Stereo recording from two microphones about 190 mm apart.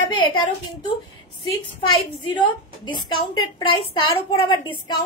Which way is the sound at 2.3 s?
25° left (ahead or behind).